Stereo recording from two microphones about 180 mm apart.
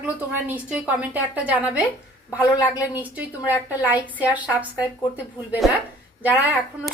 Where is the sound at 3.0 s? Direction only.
10° right (ahead or behind).